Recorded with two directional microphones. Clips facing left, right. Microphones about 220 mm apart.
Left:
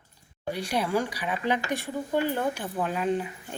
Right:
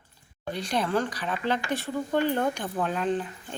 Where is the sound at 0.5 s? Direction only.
10° left (ahead or behind).